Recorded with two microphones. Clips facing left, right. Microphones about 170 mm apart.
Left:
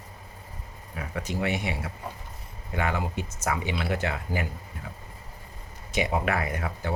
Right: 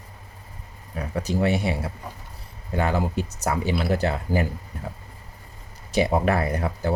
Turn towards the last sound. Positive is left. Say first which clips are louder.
# right 6 dB
turn(degrees=-35)  # may be behind; listen again after turning